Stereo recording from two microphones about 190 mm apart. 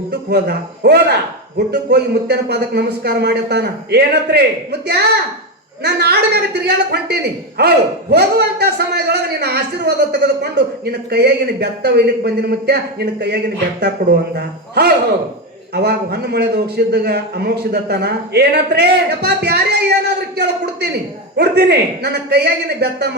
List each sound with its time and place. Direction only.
0.1 s a man's voice: 60° right (ahead or behind)